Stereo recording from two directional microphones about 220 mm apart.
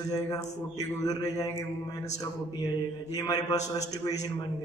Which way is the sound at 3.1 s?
15° left (ahead or behind).